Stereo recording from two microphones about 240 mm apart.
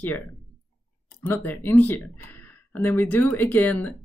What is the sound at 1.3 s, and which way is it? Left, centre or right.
Speech, centre.